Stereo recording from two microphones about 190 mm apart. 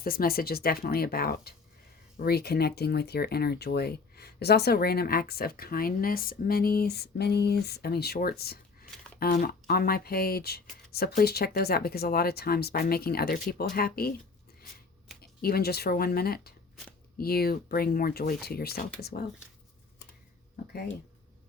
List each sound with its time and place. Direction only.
0.0 s speech: 50° left (ahead or behind)
15.2 s speech: 55° left (ahead or behind)